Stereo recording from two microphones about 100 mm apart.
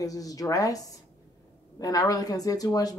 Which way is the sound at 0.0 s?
35° left (ahead or behind).